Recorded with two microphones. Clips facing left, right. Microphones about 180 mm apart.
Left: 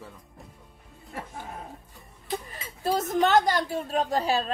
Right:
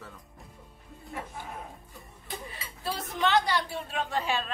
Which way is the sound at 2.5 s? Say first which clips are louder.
Left 9 dB; 45° left (ahead or behind).